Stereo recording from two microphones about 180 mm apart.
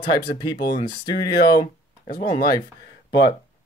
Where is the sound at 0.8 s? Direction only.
25° left (ahead or behind).